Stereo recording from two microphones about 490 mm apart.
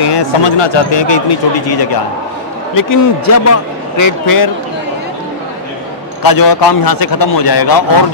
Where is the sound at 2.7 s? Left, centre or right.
Left.